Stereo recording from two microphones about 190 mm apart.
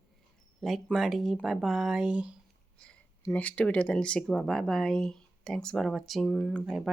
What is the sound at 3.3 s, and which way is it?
Speech, 5° left (ahead or behind).